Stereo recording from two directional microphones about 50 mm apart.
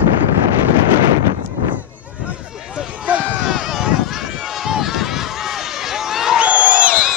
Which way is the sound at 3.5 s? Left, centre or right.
Centre.